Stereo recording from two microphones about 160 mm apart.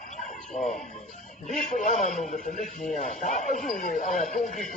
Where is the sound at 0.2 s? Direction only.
50° left (ahead or behind).